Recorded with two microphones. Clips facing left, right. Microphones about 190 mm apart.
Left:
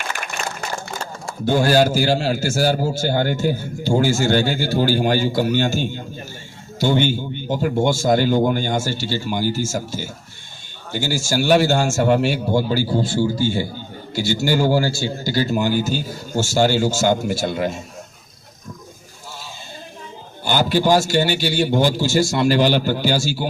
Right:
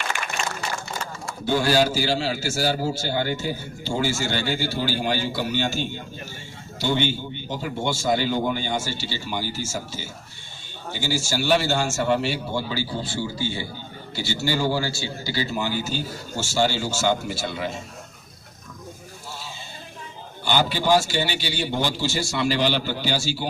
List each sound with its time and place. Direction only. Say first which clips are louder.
1.5 s a man's voice: left 4 dB; 45° left (ahead or behind)
20.4 s a man's voice: left 5 dB; 45° left (ahead or behind)